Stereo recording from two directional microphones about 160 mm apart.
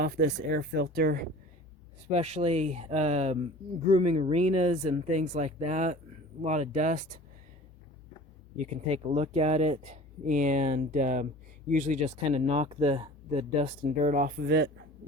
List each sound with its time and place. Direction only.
0.0 s speech: 75° right (ahead or behind)
2.1 s speech: 45° right (ahead or behind)
8.5 s speech: 45° right (ahead or behind)
13.8 s speech: 55° right (ahead or behind); by 14.7 s 90° right